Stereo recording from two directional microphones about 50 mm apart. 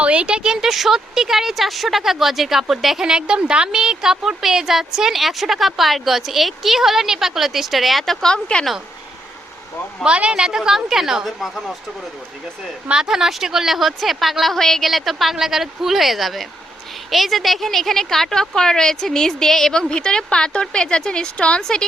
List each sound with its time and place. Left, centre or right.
0.0 s speech: right
0.7 s speech: centre
8.3 s a woman's voice: centre
10.0 s a woman's voice: right
11.3 s speech: centre
12.9 s a woman's voice: centre; by 21.6 s left
21.6 s a woman's voice: centre